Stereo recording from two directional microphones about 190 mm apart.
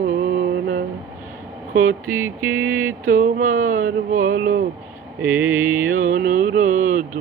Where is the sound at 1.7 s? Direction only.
90° right.